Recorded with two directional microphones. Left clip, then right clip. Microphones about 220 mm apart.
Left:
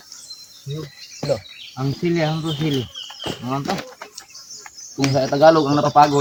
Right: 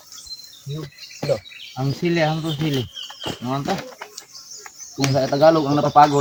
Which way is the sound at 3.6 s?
15° left (ahead or behind).